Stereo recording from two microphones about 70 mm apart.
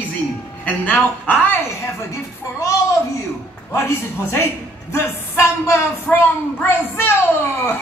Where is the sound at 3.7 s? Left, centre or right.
Left.